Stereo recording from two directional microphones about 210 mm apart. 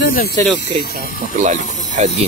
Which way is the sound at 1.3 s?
35° right (ahead or behind).